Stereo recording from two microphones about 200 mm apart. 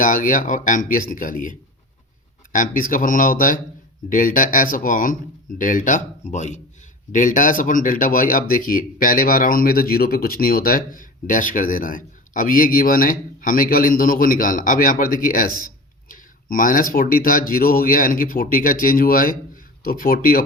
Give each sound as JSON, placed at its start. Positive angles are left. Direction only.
{"t": 0.0, "sound": "speech", "side_deg": 40}